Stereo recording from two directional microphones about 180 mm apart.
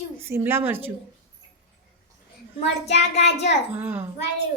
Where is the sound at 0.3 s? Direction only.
15° right (ahead or behind).